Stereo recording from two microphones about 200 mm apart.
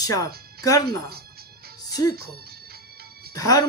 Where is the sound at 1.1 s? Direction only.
50° right (ahead or behind).